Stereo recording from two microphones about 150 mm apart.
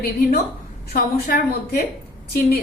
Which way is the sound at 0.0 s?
90° left.